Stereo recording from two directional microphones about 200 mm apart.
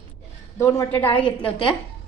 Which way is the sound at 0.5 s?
15° left (ahead or behind).